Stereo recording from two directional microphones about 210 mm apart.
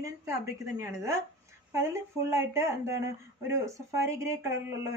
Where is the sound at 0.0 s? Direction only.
15° right (ahead or behind).